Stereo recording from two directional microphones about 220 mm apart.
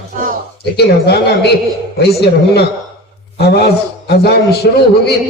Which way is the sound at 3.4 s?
45° left (ahead or behind).